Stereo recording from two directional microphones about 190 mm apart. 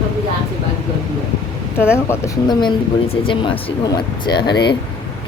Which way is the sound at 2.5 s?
25° left (ahead or behind).